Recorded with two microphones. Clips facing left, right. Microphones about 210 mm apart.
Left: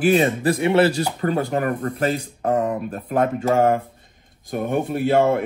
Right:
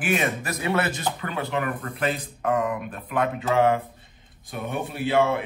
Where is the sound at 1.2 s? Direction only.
45° left (ahead or behind).